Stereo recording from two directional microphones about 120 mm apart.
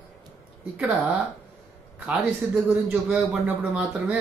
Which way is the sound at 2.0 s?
10° right (ahead or behind).